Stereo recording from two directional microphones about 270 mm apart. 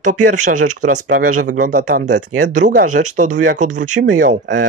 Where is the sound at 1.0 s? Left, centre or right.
Right.